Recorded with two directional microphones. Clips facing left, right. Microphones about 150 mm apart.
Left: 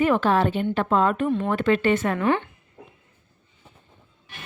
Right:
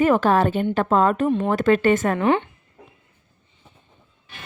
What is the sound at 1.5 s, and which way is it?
Speech, 45° right (ahead or behind).